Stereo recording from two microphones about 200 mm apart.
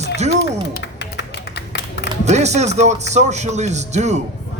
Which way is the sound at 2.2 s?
35° right (ahead or behind).